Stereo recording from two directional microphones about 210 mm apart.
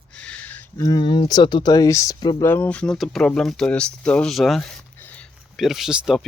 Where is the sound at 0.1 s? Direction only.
5° left (ahead or behind).